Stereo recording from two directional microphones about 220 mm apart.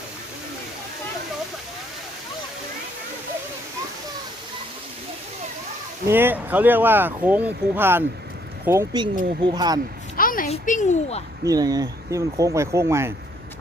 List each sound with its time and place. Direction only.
6.1 s speech: 10° right (ahead or behind)
10.2 s a sound: 40° left (ahead or behind)
10.5 s speech: 35° left (ahead or behind)
11.4 s speech: 15° right (ahead or behind)